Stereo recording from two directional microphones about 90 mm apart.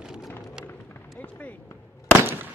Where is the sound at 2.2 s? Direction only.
25° right (ahead or behind).